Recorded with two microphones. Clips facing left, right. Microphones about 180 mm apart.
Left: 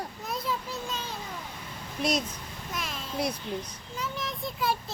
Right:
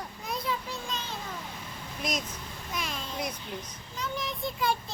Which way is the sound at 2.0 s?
35° left (ahead or behind).